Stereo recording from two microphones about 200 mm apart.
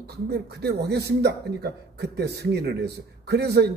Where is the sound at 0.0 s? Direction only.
55° right (ahead or behind).